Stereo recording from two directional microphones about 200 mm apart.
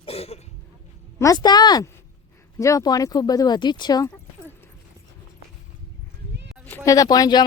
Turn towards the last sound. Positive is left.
turn(degrees=20)  # may be behind; listen again after turning